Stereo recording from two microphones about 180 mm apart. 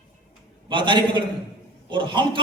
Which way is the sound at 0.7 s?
25° right (ahead or behind).